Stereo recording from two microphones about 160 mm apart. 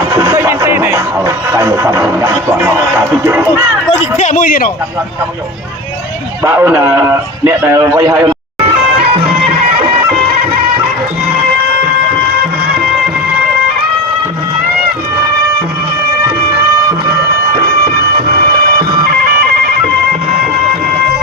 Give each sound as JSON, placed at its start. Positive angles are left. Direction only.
{"t": 0.2, "sound": "music", "side_deg": -15}
{"t": 2.6, "sound": "a man's voice", "side_deg": -15}
{"t": 4.2, "sound": "speech", "side_deg": 55}
{"t": 6.4, "sound": "a man's voice", "side_deg": -15}
{"t": 9.2, "sound": "music", "side_deg": -80}
{"t": 17.6, "sound": "bagpipes", "side_deg": -75}
{"t": 20.3, "sound": "music", "side_deg": -70}